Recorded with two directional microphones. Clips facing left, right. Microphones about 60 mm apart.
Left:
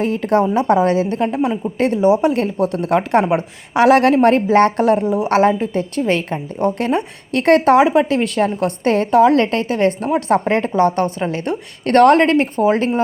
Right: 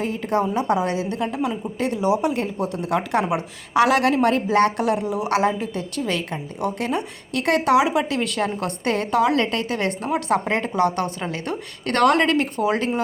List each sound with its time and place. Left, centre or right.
0.0 s a woman's voice: left
2.3 s a woman's voice: left